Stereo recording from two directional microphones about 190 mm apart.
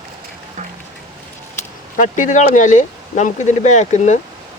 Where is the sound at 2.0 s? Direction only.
40° left (ahead or behind).